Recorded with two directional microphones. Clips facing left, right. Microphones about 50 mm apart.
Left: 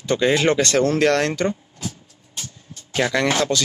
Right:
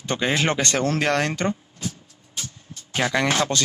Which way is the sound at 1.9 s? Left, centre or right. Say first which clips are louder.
Right 2 dB; centre.